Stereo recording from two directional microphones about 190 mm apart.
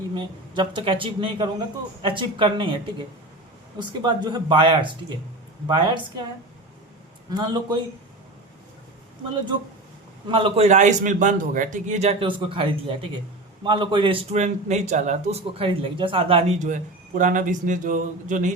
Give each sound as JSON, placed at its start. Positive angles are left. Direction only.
{"t": 0.2, "sound": "speech", "side_deg": -25}
{"t": 3.8, "sound": "speech", "side_deg": -25}
{"t": 7.3, "sound": "speech", "side_deg": -20}
{"t": 10.2, "sound": "a man's voice", "side_deg": -25}